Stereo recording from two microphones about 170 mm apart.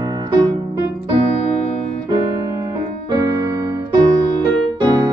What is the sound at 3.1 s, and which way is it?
Keyboard, 25° right (ahead or behind).